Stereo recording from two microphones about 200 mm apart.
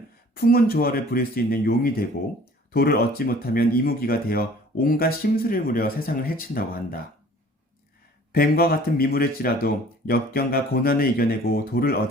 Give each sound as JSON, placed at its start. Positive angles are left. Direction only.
{"t": 0.3, "sound": "speech", "side_deg": 50}
{"t": 8.3, "sound": "speech", "side_deg": 50}